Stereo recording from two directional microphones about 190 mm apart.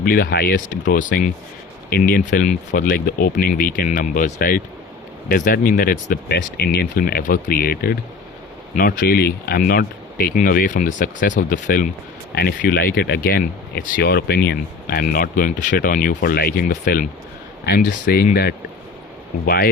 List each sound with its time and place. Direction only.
0.0 s speech: 50° left (ahead or behind)
12.3 s speech: 55° left (ahead or behind)